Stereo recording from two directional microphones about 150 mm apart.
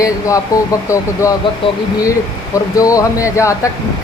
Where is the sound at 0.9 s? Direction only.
20° left (ahead or behind).